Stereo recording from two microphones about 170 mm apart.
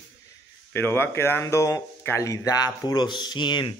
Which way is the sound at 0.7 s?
10° left (ahead or behind).